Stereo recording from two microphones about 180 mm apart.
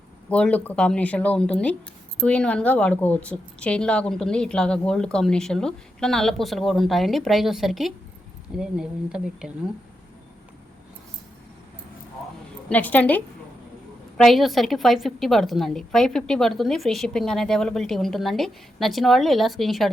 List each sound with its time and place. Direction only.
0.3 s speech: 5° left (ahead or behind)
12.6 s speech: 10° left (ahead or behind)